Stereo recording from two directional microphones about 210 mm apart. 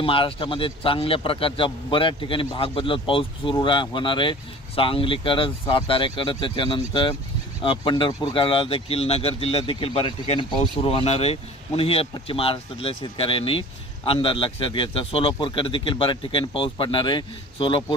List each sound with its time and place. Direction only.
0.0 s speech: 25° left (ahead or behind)